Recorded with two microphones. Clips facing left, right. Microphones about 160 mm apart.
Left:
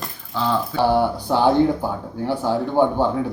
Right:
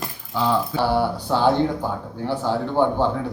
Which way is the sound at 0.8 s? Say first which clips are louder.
Left 3 dB; 15° left (ahead or behind).